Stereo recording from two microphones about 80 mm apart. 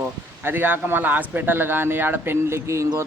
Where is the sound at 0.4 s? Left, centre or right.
Right.